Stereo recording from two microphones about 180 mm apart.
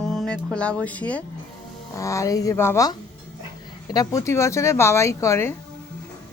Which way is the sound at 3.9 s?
15° left (ahead or behind).